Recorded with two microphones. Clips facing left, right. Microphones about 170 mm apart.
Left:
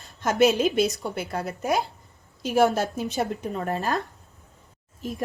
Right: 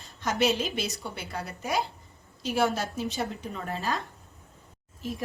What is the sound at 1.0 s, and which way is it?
A woman's voice, 50° left (ahead or behind).